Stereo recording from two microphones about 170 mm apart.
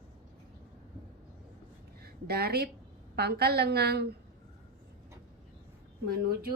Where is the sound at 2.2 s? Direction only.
65° right (ahead or behind).